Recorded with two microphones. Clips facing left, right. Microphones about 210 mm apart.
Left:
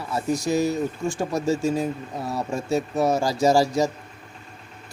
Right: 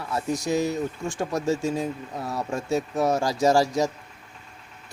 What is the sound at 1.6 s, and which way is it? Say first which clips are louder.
Speech: left 3 dB; 5° left (ahead or behind).